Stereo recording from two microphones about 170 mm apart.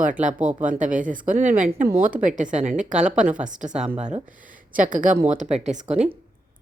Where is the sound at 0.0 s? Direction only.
50° right (ahead or behind).